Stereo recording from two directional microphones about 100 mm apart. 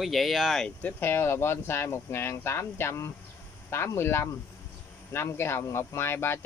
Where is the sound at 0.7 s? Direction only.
20° left (ahead or behind).